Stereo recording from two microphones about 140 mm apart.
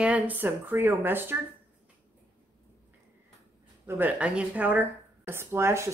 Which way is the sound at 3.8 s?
10° right (ahead or behind).